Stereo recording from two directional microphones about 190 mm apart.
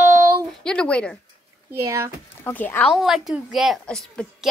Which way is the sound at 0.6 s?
5° left (ahead or behind).